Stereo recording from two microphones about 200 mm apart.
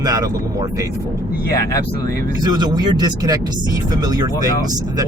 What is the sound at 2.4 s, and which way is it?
Speech, 20° right (ahead or behind).